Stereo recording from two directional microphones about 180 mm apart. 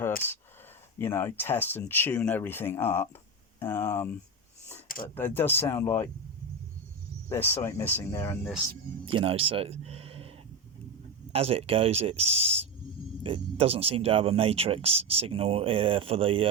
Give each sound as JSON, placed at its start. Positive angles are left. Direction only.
{"t": 0.9, "sound": "speech", "side_deg": 15}
{"t": 7.3, "sound": "speech", "side_deg": 10}
{"t": 9.0, "sound": "speech", "side_deg": -30}